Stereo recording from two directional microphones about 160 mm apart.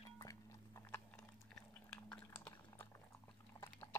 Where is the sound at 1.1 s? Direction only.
5° left (ahead or behind).